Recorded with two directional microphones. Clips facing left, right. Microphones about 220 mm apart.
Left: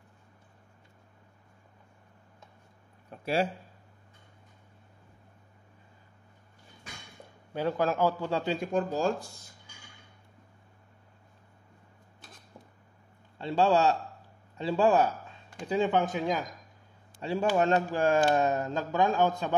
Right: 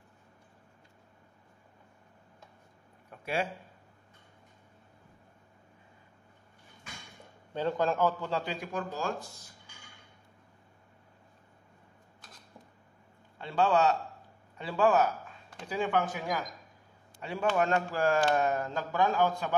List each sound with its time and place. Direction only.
3.1 s a sound: 35° left (ahead or behind)
7.5 s a man's voice: 10° left (ahead or behind)
8.5 s speech: 30° left (ahead or behind)
13.4 s a man's voice: 25° left (ahead or behind)